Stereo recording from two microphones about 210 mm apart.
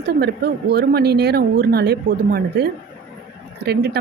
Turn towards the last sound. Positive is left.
turn(degrees=-50)  # may be behind; listen again after turning